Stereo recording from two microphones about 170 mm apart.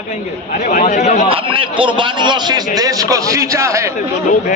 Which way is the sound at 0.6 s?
45° left (ahead or behind).